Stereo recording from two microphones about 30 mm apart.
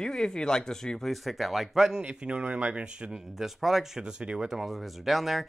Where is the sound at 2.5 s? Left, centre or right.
Right.